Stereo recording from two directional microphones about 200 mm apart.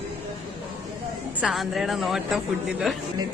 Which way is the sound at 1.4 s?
Centre (ahead or behind).